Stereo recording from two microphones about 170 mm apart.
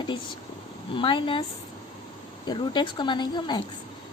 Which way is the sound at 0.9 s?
30° left (ahead or behind).